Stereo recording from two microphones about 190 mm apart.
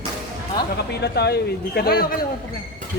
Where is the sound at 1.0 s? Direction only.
60° left (ahead or behind).